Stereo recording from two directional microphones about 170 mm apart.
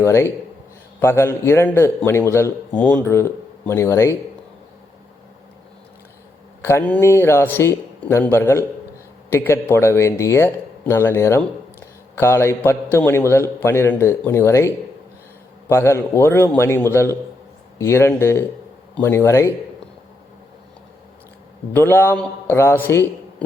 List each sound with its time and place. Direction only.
0.0 s a man's voice: 15° left (ahead or behind)
6.6 s a man's voice: 15° left (ahead or behind)
15.7 s a man's voice: 15° left (ahead or behind)
21.7 s a man's voice: 15° left (ahead or behind)